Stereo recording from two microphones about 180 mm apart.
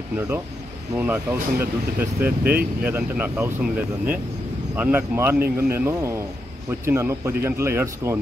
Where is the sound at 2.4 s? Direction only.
55° right (ahead or behind).